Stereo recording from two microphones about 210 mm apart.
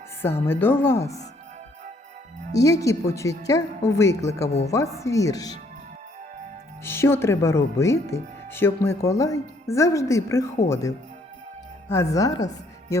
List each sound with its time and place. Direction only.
0.2 s speech: 10° left (ahead or behind)
2.5 s speech: 15° left (ahead or behind)
4.4 s a woman's voice: 30° left (ahead or behind)
4.7 s speech: 15° left (ahead or behind)
6.8 s speech: 10° left (ahead or behind)